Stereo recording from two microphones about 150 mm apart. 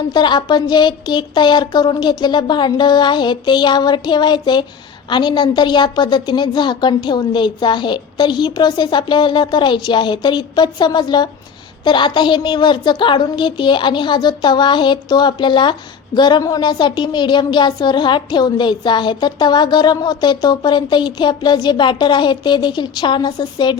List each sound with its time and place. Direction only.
0.1 s a woman's voice: 30° left (ahead or behind)